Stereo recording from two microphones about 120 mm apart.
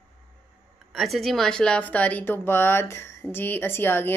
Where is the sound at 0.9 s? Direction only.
Centre (ahead or behind).